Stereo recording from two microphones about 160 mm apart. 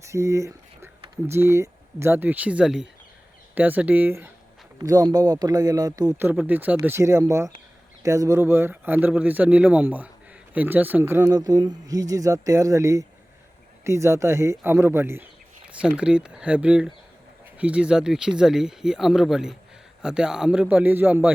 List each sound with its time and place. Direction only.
0.0 s a man's voice: 20° right (ahead or behind)